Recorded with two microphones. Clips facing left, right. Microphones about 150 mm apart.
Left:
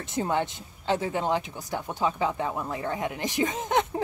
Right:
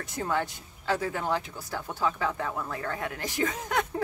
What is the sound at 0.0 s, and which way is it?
Speech, 20° left (ahead or behind).